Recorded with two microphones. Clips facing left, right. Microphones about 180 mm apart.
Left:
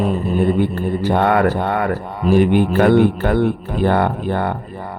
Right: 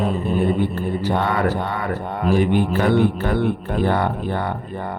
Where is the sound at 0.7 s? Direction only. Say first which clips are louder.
Left 3 dB; 55° left (ahead or behind).